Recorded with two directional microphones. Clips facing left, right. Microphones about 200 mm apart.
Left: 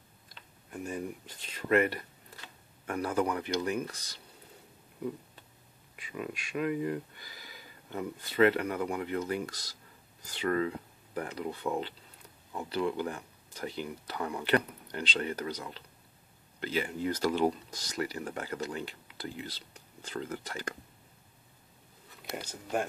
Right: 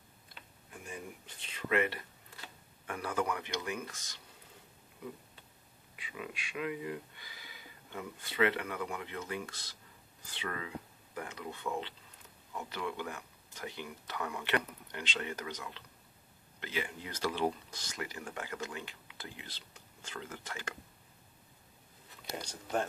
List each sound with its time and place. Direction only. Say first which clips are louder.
0.8 s speech: left 8 dB; 40° left (ahead or behind)
5.9 s speech: left 6 dB; 45° left (ahead or behind)
22.4 s speech: left 2 dB; 10° left (ahead or behind)